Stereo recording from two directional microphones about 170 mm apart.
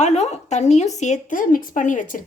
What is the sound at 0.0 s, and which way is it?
Speech, 40° left (ahead or behind).